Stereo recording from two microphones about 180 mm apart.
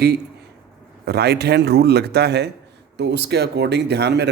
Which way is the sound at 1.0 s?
65° right (ahead or behind).